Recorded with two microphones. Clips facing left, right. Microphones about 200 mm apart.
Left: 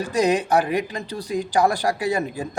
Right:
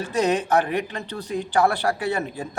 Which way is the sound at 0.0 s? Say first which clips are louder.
Left 2 dB; 15° left (ahead or behind).